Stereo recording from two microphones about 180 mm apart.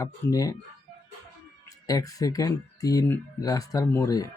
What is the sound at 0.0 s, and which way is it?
Speech, 20° left (ahead or behind).